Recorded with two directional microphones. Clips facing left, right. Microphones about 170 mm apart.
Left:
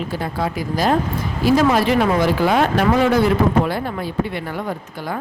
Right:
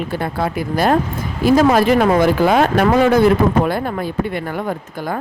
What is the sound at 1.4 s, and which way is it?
A woman's voice, 45° right (ahead or behind).